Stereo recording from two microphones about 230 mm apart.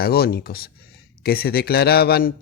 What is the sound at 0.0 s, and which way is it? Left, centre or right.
A man's voice, left.